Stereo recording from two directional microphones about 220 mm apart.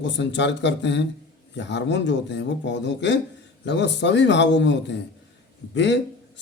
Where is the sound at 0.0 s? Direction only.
55° left (ahead or behind).